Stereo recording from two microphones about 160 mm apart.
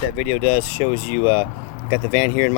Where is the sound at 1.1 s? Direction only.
50° left (ahead or behind).